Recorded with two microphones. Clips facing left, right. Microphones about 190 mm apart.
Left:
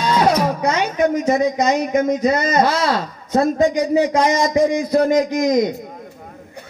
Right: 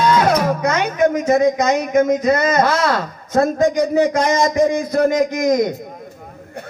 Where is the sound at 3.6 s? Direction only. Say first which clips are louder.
Right 1 dB; 50° right (ahead or behind).